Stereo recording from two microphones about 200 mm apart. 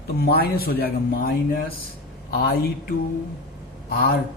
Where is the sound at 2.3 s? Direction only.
50° left (ahead or behind).